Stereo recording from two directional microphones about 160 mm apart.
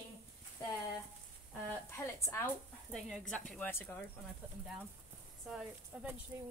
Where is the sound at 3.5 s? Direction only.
15° left (ahead or behind).